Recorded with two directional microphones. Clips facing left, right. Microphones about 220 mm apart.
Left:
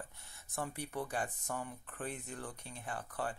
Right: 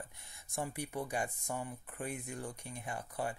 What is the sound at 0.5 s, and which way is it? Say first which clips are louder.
Speech: right 2 dB; 10° right (ahead or behind).